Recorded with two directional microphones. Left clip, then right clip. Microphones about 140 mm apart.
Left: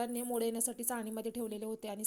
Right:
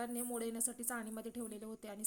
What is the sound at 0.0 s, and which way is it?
A woman's voice, 30° left (ahead or behind).